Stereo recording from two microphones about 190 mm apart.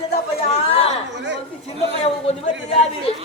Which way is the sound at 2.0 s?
35° left (ahead or behind).